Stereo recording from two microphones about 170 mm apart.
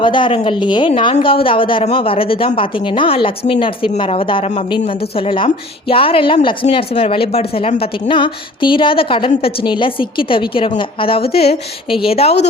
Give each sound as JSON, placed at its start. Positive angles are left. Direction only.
{"t": 0.0, "sound": "a woman's voice", "side_deg": 30}